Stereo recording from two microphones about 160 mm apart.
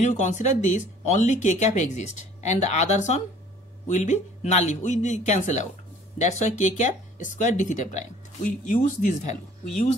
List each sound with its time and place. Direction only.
0.0 s speech: 50° left (ahead or behind)